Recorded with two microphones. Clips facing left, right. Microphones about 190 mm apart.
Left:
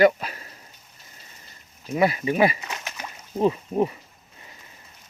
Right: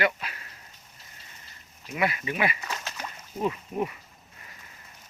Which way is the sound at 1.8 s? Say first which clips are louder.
Left 7 dB; 35° left (ahead or behind).